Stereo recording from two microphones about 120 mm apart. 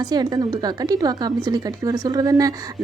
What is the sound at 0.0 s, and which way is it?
A woman's voice, 35° right (ahead or behind).